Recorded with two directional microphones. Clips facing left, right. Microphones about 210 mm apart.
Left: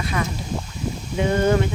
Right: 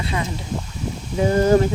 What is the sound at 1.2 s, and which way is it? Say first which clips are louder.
Speech: right 4 dB; 35° right (ahead or behind).